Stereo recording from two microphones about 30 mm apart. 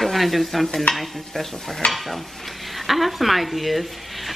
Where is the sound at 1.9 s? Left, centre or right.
Centre.